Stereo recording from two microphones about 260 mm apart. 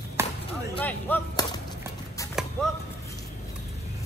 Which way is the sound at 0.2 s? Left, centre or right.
Centre.